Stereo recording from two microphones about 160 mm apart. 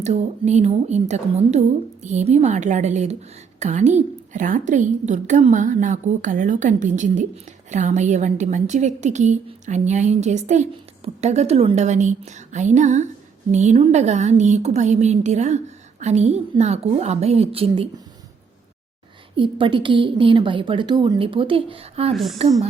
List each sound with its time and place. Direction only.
0.0 s a woman's voice: 45° right (ahead or behind)
19.4 s a woman's voice: 30° right (ahead or behind)
22.1 s speech: centre (ahead or behind)